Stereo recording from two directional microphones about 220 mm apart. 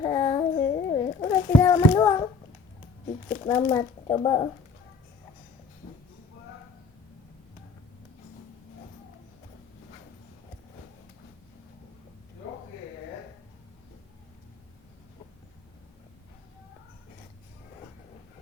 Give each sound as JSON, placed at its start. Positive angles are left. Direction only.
{"t": 0.0, "sound": "child singing", "side_deg": 20}
{"t": 3.2, "sound": "speech", "side_deg": 20}